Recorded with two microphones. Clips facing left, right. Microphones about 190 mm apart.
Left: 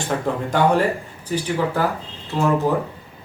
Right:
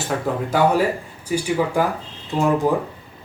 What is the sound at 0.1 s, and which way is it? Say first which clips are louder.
A man's voice: even; centre (ahead or behind).